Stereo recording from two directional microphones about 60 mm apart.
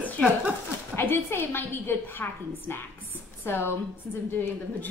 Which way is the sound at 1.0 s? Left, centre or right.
Left.